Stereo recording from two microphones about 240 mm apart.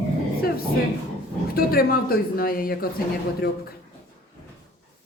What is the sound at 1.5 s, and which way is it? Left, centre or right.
Speech, left.